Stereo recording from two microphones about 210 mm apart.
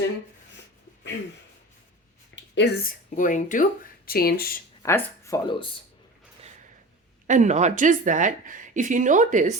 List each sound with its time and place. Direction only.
2.3 s a sound: 55° left (ahead or behind)
3.2 s speech: 40° left (ahead or behind)
4.8 s speech: 15° left (ahead or behind)
7.3 s speech: 35° right (ahead or behind)